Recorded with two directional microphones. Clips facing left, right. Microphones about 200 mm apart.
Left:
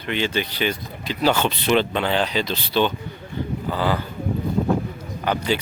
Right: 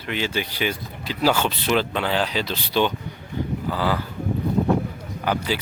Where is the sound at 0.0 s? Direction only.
5° right (ahead or behind).